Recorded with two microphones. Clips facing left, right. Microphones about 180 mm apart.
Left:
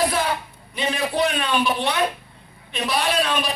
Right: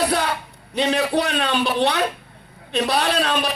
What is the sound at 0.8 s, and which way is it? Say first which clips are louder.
A man's voice: right 3 dB; 65° right (ahead or behind).